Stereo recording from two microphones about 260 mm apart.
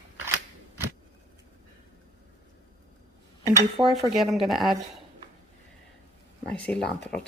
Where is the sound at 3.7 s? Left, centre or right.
Centre.